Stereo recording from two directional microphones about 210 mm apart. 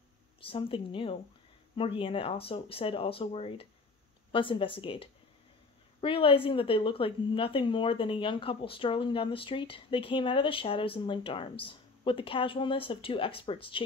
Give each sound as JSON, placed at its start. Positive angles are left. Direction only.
{"t": 0.4, "sound": "a woman's voice", "side_deg": 25}